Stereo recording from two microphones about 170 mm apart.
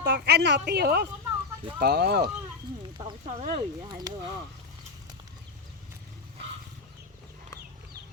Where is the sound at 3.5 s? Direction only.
25° right (ahead or behind).